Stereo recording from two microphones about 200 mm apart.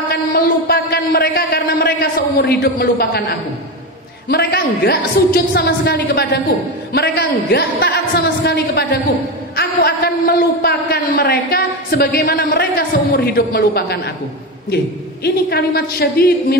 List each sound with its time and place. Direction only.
0.1 s a sound: 50° left (ahead or behind)
4.3 s a man's voice: 50° left (ahead or behind)
15.2 s a man's voice: 55° left (ahead or behind)